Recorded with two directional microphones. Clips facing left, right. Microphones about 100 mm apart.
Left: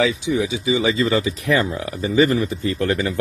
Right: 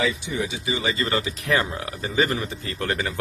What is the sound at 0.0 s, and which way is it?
Speech, 90° left.